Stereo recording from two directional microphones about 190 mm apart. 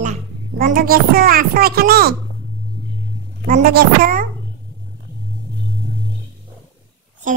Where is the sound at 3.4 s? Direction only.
45° right (ahead or behind).